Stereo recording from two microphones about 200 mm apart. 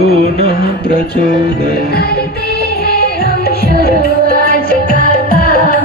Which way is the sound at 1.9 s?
50° left (ahead or behind).